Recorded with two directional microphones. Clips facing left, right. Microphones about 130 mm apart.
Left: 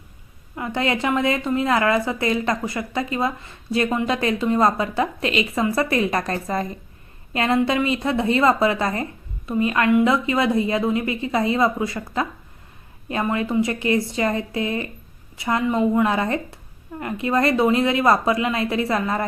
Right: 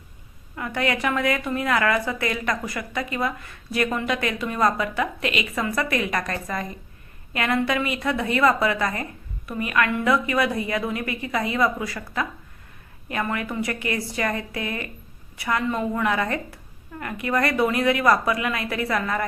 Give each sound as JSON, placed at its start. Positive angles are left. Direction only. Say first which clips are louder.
{"t": 0.5, "sound": "a woman's voice", "louder": "left 2 dB", "side_deg": 25}